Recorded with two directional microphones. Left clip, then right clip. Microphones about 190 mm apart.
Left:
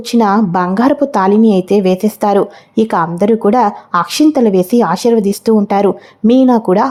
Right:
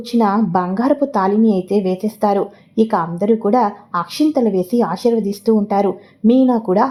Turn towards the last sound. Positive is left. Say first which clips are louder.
# left 4 dB
turn(degrees=25)  # may be behind; listen again after turning